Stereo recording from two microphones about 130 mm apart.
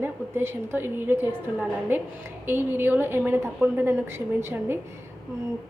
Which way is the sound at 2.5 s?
15° right (ahead or behind).